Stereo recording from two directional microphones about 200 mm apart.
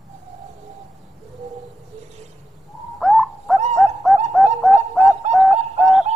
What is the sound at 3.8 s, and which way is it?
Bird, centre (ahead or behind).